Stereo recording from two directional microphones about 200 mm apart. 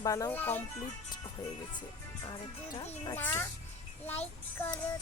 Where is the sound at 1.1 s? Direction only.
20° left (ahead or behind).